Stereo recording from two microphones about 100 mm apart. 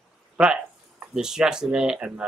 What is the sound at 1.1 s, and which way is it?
Speech, 5° right (ahead or behind).